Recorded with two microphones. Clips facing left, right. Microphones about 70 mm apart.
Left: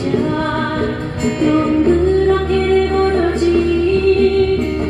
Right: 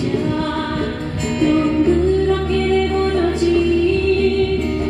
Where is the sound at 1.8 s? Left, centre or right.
Left.